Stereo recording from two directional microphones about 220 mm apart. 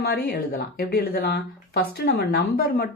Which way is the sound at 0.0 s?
45° left (ahead or behind).